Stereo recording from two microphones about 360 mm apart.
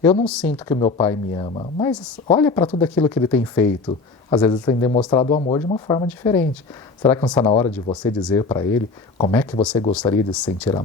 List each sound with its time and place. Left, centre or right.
0.0 s speech: centre
9.9 s speech: centre